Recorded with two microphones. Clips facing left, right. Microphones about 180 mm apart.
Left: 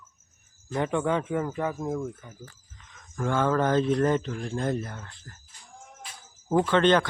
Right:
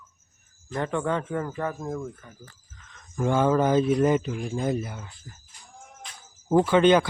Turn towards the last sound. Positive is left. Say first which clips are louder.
# right 3 dB
turn(degrees=-10)  # may be behind; listen again after turning